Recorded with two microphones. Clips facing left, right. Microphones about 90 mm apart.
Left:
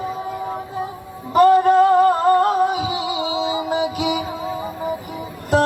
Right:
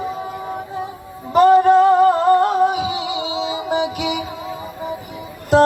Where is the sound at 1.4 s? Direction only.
20° right (ahead or behind).